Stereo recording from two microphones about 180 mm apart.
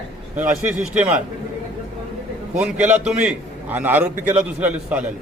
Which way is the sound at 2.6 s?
5° right (ahead or behind).